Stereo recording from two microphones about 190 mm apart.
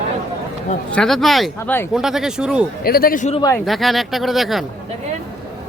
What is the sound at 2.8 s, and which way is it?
Speech, 50° left (ahead or behind).